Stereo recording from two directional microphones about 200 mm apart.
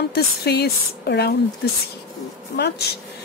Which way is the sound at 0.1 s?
55° left (ahead or behind).